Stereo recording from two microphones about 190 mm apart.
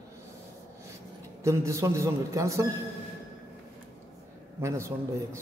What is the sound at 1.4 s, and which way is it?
A man's voice, 15° right (ahead or behind).